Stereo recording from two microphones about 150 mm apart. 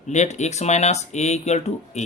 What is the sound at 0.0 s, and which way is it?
Speech, 50° left (ahead or behind).